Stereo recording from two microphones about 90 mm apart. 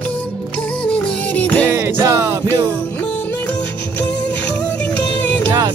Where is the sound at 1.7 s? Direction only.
30° right (ahead or behind).